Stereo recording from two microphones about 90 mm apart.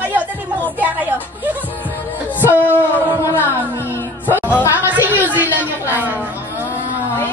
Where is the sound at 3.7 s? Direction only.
25° left (ahead or behind).